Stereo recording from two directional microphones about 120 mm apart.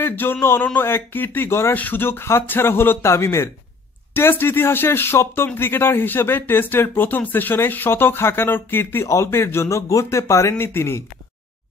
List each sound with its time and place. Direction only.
0.0 s a man's voice: 15° left (ahead or behind)